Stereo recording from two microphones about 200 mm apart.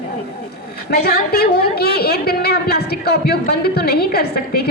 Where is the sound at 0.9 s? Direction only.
50° left (ahead or behind).